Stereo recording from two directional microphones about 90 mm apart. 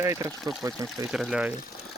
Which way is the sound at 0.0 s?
30° right (ahead or behind).